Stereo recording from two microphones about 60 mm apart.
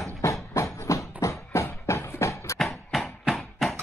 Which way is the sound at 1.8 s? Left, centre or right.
Left.